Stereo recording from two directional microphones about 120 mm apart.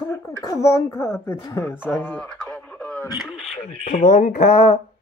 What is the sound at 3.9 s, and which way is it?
Speech, 90° left.